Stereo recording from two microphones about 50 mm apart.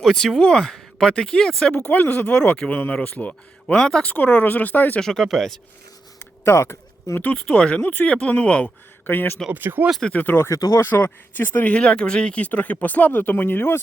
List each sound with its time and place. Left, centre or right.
0.0 s speech: centre
1.7 s speech: left
3.8 s speech: centre
4.0 s speech: left
4.9 s speech: centre
6.1 s a sound: left
7.2 s speech: left
9.0 s speech: left
9.5 s speech: right
10.1 s speech: left
10.8 s speech: left
11.7 s speech: left